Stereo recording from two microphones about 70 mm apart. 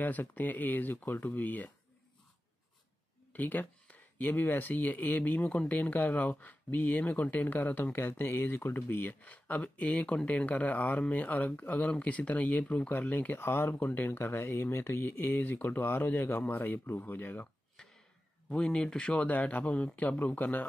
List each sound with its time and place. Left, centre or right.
0.0 s speech: left
3.3 s speech: left
18.5 s speech: centre